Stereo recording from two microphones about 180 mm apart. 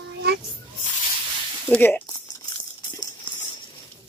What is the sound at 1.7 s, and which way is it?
Speech, 10° left (ahead or behind).